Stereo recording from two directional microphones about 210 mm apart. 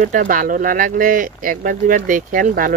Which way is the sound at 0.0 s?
40° right (ahead or behind).